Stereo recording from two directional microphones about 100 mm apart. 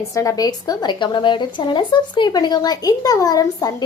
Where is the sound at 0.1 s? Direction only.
30° left (ahead or behind).